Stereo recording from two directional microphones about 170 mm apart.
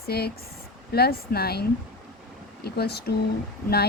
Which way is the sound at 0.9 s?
65° left (ahead or behind).